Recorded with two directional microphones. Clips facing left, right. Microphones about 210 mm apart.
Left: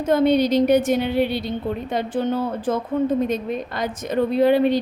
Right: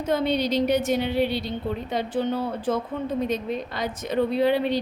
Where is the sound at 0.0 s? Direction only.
50° left (ahead or behind).